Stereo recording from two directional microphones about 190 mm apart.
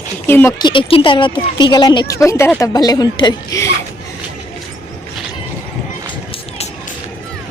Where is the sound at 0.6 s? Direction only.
25° left (ahead or behind).